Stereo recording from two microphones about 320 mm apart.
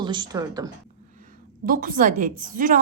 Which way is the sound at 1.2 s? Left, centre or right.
Right.